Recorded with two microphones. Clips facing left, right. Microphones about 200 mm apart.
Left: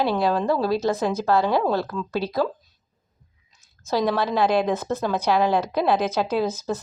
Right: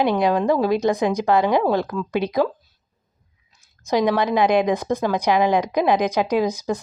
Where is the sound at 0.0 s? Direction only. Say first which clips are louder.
Right 3 dB; 15° right (ahead or behind).